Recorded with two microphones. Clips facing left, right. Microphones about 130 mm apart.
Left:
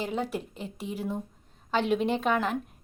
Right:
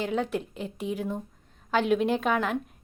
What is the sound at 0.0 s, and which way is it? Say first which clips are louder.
A woman's voice: right 3 dB; 5° left (ahead or behind).